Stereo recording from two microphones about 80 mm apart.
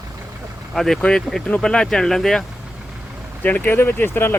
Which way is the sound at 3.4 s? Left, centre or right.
Left.